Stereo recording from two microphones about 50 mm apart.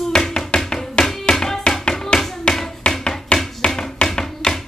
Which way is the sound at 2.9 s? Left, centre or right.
Centre.